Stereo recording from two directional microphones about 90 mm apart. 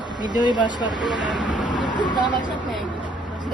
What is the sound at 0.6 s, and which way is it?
Speech, 55° left (ahead or behind).